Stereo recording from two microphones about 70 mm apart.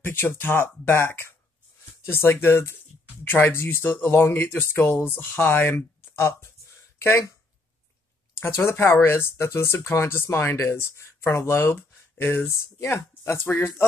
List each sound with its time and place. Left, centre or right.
0.0 s speech: left
8.4 s speech: left